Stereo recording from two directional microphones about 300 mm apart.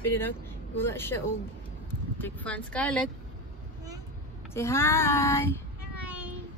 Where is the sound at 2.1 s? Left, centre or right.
Centre.